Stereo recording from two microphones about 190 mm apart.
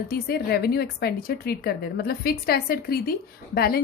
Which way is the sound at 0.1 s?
55° left (ahead or behind).